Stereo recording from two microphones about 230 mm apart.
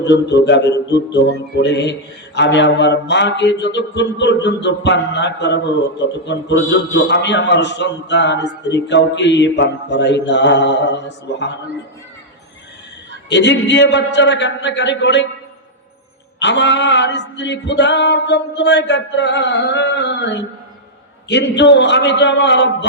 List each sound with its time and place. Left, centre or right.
0.0 s speech: left
13.3 s speech: left
16.4 s speech: left